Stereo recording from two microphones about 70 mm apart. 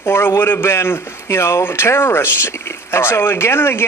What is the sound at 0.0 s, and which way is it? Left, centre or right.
A man's voice, left.